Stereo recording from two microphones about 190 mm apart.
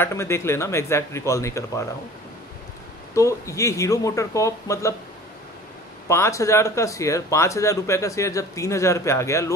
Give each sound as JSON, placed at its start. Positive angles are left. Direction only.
{"t": 0.0, "sound": "speech", "side_deg": 15}
{"t": 3.2, "sound": "speech", "side_deg": 15}
{"t": 6.0, "sound": "speech", "side_deg": 15}